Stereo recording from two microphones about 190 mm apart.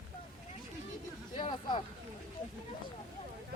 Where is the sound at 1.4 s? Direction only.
25° left (ahead or behind).